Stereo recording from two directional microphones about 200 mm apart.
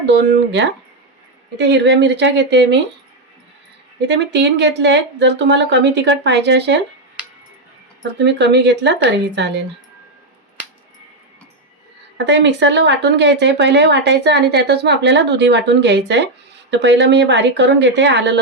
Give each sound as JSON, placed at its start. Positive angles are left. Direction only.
{"t": 0.0, "sound": "a woman's voice", "side_deg": -60}
{"t": 4.1, "sound": "a woman's voice", "side_deg": -60}
{"t": 8.2, "sound": "a woman's voice", "side_deg": -60}
{"t": 12.1, "sound": "a woman's voice", "side_deg": -60}